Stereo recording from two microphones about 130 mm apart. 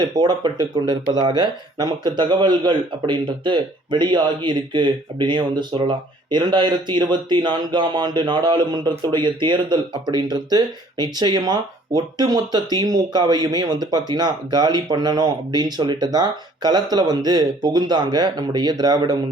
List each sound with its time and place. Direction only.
0.0 s speech: 30° right (ahead or behind)